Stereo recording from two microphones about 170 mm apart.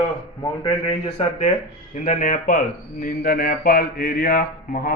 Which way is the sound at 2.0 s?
50° left (ahead or behind).